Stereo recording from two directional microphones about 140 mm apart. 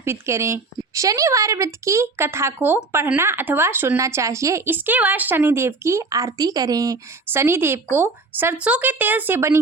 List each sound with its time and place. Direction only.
0.0 s speech: 20° right (ahead or behind)